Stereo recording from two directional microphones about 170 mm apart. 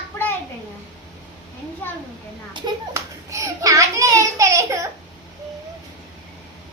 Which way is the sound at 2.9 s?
20° right (ahead or behind).